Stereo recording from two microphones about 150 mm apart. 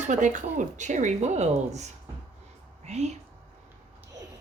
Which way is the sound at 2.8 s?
50° right (ahead or behind).